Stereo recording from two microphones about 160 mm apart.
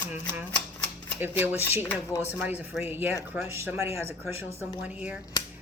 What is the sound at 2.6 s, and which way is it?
Speech, 10° right (ahead or behind).